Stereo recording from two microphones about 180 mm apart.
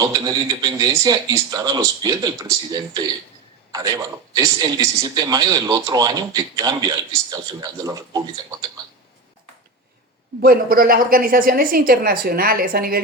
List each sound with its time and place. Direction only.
0.0 s a man's voice: 20° right (ahead or behind)
10.4 s a woman's voice: 55° right (ahead or behind)